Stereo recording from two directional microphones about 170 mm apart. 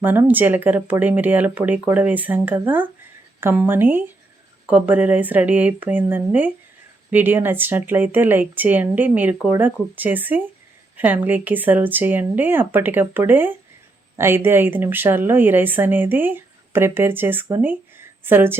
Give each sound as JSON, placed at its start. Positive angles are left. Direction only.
{"t": 0.0, "sound": "speech", "side_deg": -10}